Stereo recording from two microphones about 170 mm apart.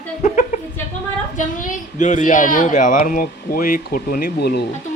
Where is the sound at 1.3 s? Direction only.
50° left (ahead or behind); by 4.7 s 70° left (ahead or behind).